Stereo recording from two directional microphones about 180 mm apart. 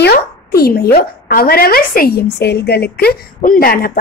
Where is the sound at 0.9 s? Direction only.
55° left (ahead or behind).